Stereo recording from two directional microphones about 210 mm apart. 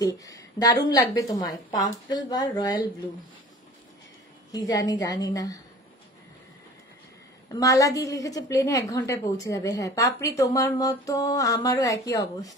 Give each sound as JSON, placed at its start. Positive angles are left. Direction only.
{"t": 0.2, "sound": "a woman's voice", "side_deg": 15}
{"t": 4.5, "sound": "a woman's voice", "side_deg": 15}
{"t": 7.5, "sound": "a woman's voice", "side_deg": 15}